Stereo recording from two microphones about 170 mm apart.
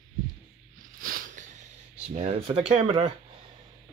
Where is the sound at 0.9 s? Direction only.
55° right (ahead or behind).